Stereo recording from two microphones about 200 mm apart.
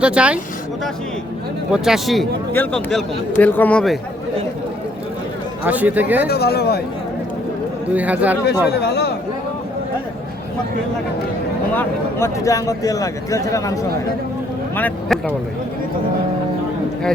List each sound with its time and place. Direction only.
0.0 s speech: 5° right (ahead or behind)
1.7 s a man's voice: centre (ahead or behind)
5.6 s speech: 10° right (ahead or behind)
6.2 s speech: 50° left (ahead or behind)
7.9 s speech: 5° right (ahead or behind)
8.7 s a man's voice: 55° left (ahead or behind)
11.8 s a man's voice: 15° left (ahead or behind)
14.8 s a man's voice: 10° left (ahead or behind)